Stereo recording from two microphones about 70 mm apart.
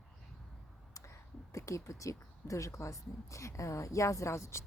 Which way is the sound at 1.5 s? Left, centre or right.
Left.